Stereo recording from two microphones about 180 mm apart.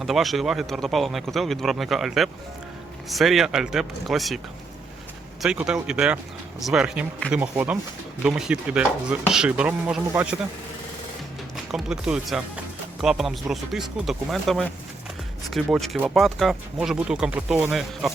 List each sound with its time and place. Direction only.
0.0 s speech: centre (ahead or behind)
5.4 s speech: 5° right (ahead or behind)
11.5 s speech: centre (ahead or behind)